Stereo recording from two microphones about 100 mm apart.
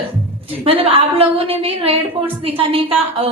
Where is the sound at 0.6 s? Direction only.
75° right (ahead or behind).